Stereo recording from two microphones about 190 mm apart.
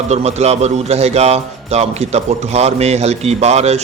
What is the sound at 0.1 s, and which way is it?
Speech, 35° right (ahead or behind).